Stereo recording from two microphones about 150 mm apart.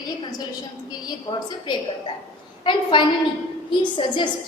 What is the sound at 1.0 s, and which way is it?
A woman's voice, 30° left (ahead or behind).